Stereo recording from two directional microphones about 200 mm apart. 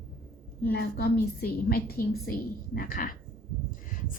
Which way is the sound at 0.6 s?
50° left (ahead or behind).